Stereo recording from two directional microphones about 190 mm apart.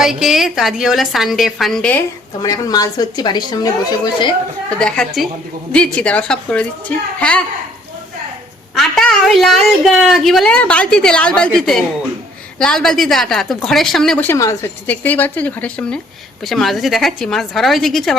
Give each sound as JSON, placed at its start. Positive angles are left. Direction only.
{"t": 0.0, "sound": "a woman's voice", "side_deg": 0}
{"t": 2.4, "sound": "a woman's voice", "side_deg": 20}
{"t": 4.8, "sound": "a woman's voice", "side_deg": 5}
{"t": 8.8, "sound": "a woman's voice", "side_deg": 0}